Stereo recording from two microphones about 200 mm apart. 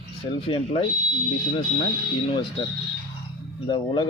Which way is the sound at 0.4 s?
25° left (ahead or behind).